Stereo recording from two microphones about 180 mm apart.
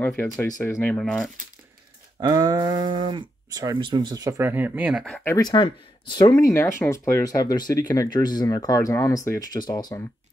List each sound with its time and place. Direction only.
0.0 s speech: 10° left (ahead or behind)
2.1 s speech: 25° right (ahead or behind); by 5.0 s 10° right (ahead or behind)
5.0 s speech: 5° left (ahead or behind)
5.3 s speech: 25° left (ahead or behind)